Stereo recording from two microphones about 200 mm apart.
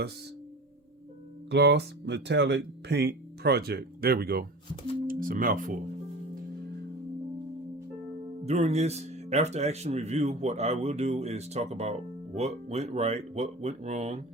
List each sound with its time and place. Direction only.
1.5 s speech: 55° right (ahead or behind)
8.4 s speech: 35° right (ahead or behind)